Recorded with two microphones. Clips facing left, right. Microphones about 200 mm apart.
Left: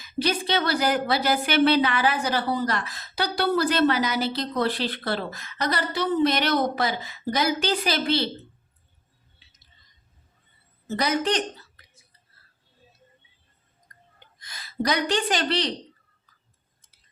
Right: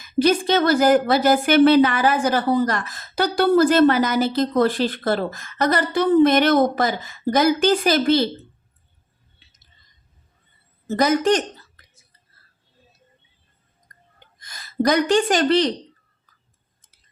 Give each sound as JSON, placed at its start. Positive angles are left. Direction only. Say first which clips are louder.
{"t": 0.0, "sound": "a woman's voice", "louder": "right 8 dB", "side_deg": -50}
{"t": 10.8, "sound": "a woman's voice", "louder": "right 7 dB", "side_deg": -45}
{"t": 13.9, "sound": "a sound", "louder": "even", "side_deg": -45}
{"t": 14.3, "sound": "speech", "louder": "right 6 dB", "side_deg": -45}